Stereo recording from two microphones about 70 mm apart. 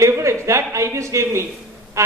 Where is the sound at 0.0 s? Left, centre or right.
Right.